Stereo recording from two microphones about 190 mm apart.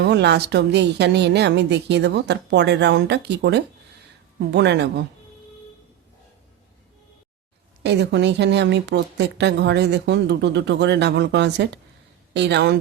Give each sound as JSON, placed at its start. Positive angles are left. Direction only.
{"t": 0.0, "sound": "a woman's voice", "side_deg": -65}
{"t": 7.8, "sound": "a woman's voice", "side_deg": -65}